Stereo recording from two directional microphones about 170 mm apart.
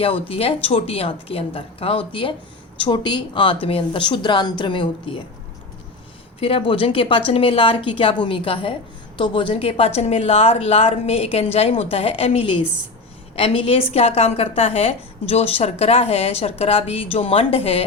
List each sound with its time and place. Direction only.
0.0 s a woman's voice: 35° left (ahead or behind)
6.4 s a woman's voice: 35° left (ahead or behind)